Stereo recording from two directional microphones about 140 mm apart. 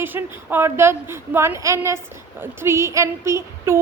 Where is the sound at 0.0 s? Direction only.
15° right (ahead or behind).